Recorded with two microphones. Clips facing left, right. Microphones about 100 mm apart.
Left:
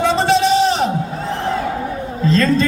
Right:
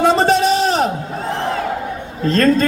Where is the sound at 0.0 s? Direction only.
45° right (ahead or behind).